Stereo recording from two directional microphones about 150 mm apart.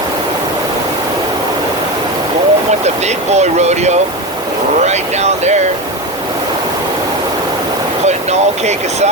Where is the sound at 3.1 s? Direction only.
50° right (ahead or behind).